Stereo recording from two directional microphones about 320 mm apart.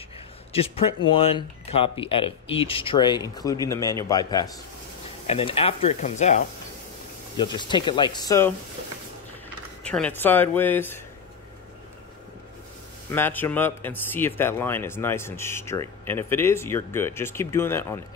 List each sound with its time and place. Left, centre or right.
0.5 s speech: centre
9.8 s speech: centre
13.1 s speech: centre